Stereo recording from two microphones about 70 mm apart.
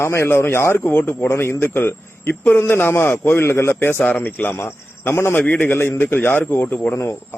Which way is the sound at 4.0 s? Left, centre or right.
Left.